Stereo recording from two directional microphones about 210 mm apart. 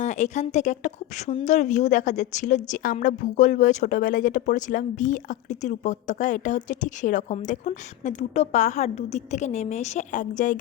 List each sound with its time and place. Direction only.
0.0 s a woman's voice: 35° left (ahead or behind)